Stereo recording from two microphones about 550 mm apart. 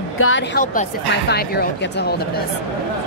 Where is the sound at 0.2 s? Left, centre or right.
Centre.